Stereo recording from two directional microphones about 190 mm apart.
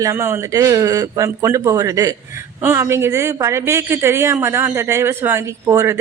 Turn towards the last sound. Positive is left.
turn(degrees=-15)  # may be behind; listen again after turning